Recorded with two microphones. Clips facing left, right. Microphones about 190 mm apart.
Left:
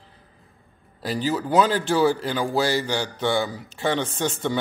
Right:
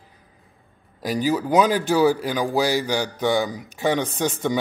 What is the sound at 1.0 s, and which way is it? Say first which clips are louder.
Speech: right 3 dB; 15° right (ahead or behind).